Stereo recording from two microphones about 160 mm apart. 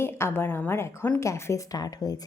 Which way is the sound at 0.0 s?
15° left (ahead or behind).